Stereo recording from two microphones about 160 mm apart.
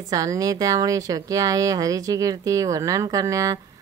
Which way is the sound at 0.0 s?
20° right (ahead or behind).